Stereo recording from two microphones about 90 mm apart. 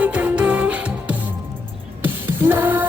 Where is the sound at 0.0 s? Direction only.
15° right (ahead or behind).